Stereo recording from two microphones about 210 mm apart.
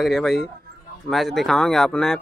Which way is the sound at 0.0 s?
Centre (ahead or behind).